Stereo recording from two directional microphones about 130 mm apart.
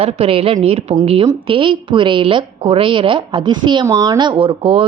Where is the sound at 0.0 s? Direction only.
45° right (ahead or behind).